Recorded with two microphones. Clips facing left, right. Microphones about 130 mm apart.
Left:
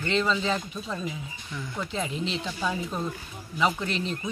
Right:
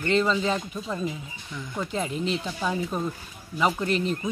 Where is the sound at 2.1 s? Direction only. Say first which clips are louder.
Right 3 dB; 45° right (ahead or behind).